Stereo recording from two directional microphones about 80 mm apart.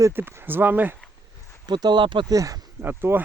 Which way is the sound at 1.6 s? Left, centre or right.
Right.